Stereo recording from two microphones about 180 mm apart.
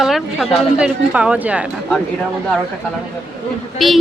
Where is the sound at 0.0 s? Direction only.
Centre (ahead or behind).